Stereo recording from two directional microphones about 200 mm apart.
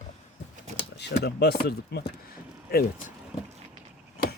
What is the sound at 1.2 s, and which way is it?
Speech, 55° left (ahead or behind).